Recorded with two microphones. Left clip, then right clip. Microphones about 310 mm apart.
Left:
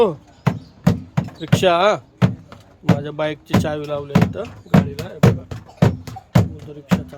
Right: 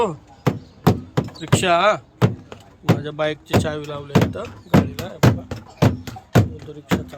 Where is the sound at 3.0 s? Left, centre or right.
Centre.